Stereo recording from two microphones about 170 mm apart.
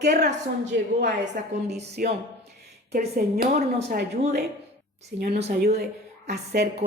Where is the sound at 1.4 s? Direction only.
70° right (ahead or behind).